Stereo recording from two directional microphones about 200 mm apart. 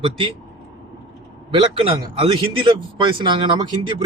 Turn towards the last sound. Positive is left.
turn(degrees=-20)  # may be behind; listen again after turning